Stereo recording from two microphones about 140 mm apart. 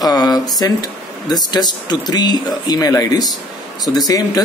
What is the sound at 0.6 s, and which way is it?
Speech, 25° left (ahead or behind).